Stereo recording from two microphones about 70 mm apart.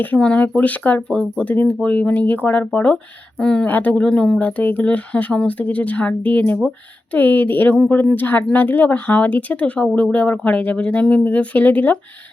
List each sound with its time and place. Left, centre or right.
0.2 s speech: left
1.1 s speech: centre
3.7 s speech: left
4.4 s speech: left